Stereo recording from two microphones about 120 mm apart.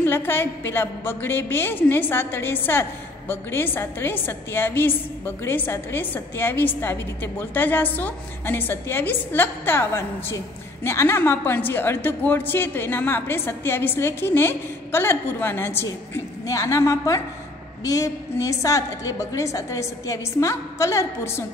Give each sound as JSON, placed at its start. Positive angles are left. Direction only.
{"t": 0.0, "sound": "a woman's voice", "side_deg": 20}